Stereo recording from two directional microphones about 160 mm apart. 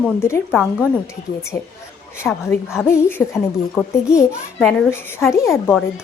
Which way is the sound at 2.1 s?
15° left (ahead or behind).